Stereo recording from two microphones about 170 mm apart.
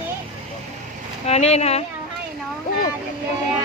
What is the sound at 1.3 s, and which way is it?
Speech, 40° left (ahead or behind).